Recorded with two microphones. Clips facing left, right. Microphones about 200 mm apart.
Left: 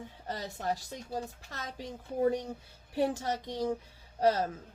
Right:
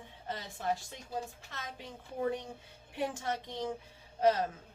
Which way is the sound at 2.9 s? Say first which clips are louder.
Left 5 dB; 35° left (ahead or behind).